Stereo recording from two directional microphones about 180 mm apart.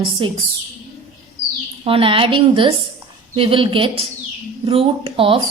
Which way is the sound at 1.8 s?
30° right (ahead or behind).